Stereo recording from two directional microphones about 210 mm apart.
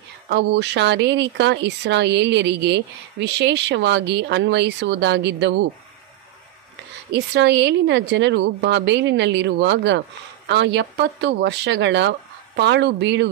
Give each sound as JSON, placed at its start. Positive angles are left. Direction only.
{"t": 0.3, "sound": "speech", "side_deg": -55}
{"t": 7.1, "sound": "speech", "side_deg": -55}